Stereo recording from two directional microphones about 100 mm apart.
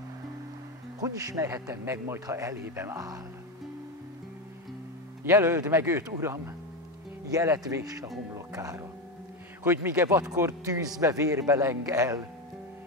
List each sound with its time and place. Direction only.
1.0 s speech: 35° right (ahead or behind)
5.2 s speech: 25° right (ahead or behind)
7.3 s speech: 35° right (ahead or behind)
8.4 s music: 30° right (ahead or behind)
9.6 s speech: 25° right (ahead or behind)